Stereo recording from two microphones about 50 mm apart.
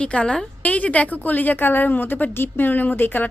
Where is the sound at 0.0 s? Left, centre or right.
Left.